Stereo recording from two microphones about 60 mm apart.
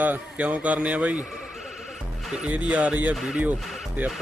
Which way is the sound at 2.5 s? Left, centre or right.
Right.